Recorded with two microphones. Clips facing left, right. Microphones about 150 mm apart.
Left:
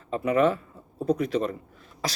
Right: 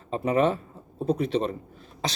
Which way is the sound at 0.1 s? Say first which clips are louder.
Left 1 dB; 30° right (ahead or behind).